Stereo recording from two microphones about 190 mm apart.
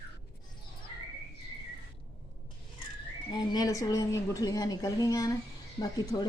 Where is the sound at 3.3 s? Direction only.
20° left (ahead or behind).